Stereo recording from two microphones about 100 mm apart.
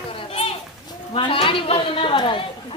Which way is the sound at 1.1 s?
65° left (ahead or behind).